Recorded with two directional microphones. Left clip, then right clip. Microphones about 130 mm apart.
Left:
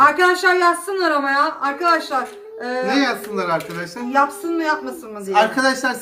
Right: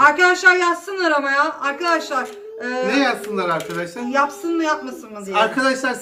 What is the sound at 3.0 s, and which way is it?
Speech, 20° left (ahead or behind).